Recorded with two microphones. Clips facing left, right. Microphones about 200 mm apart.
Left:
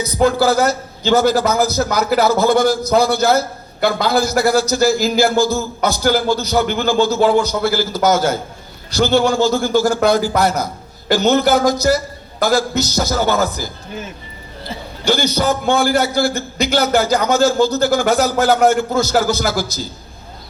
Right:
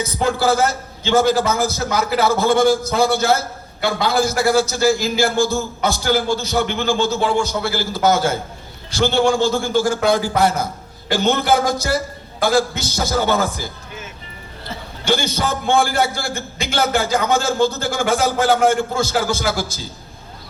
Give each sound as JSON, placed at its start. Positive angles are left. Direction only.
{"t": 0.1, "sound": "a man's voice", "side_deg": 40}
{"t": 15.0, "sound": "a man's voice", "side_deg": 40}